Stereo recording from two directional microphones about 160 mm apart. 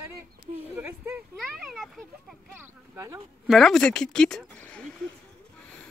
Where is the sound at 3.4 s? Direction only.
Centre (ahead or behind).